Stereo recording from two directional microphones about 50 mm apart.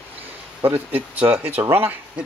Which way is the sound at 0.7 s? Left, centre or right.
Right.